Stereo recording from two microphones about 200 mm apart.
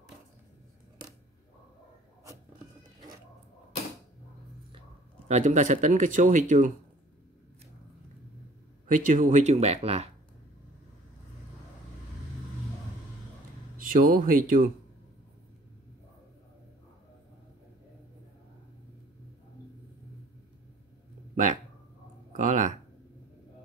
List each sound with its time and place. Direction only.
5.3 s speech: 35° right (ahead or behind)
8.8 s speech: 40° right (ahead or behind)
13.7 s speech: 45° right (ahead or behind)
22.3 s a sound: 40° right (ahead or behind)